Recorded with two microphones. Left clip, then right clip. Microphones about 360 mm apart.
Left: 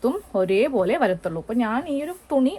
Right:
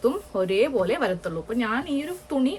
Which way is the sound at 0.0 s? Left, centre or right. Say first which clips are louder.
Left 1 dB; centre.